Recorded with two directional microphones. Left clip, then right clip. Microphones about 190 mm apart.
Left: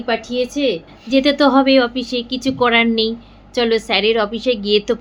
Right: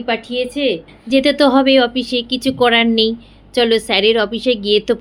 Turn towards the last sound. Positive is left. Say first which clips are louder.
# right 2 dB
turn(degrees=-25)  # may be behind; listen again after turning